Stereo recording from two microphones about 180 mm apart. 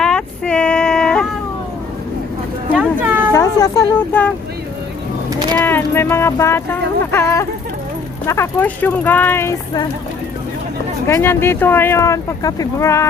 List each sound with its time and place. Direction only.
0.0 s female singing: 5° left (ahead or behind)
2.7 s a sound: 10° right (ahead or behind)
3.3 s speech: 15° left (ahead or behind)
5.3 s a sound: 20° right (ahead or behind)
5.6 s speech: 10° left (ahead or behind)
11.0 s speech: 15° left (ahead or behind)